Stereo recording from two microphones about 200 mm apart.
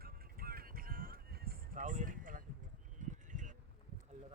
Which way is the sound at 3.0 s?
40° right (ahead or behind).